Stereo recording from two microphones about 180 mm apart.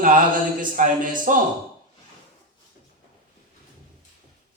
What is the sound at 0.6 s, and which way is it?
Speech, 50° right (ahead or behind).